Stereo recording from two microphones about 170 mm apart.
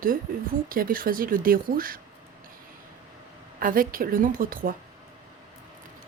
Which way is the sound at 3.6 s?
55° right (ahead or behind).